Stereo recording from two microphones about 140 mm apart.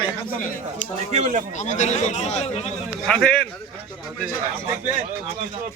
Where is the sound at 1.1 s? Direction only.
60° right (ahead or behind).